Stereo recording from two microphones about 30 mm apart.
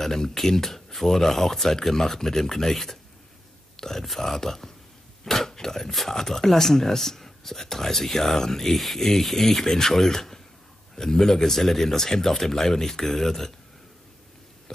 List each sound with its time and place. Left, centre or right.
0.0 s speech: centre
3.7 s whispering: centre
4.2 s speech: centre
5.2 s a sound: centre
6.0 s speech: centre